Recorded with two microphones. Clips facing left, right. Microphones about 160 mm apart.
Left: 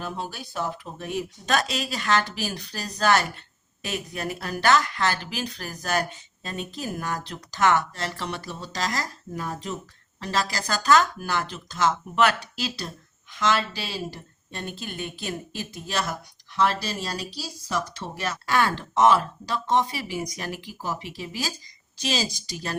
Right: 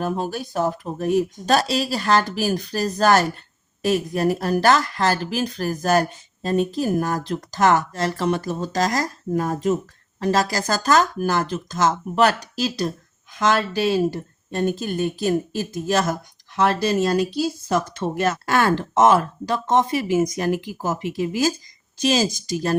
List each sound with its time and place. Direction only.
0.0 s speech: 45° right (ahead or behind)